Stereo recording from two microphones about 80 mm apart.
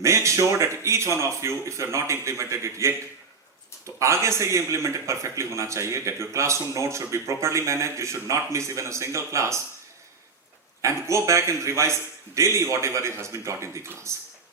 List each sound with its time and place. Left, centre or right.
0.0 s a man's voice: right
10.8 s a man's voice: right